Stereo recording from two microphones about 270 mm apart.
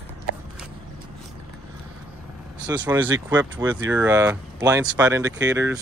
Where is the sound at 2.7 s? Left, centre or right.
Centre.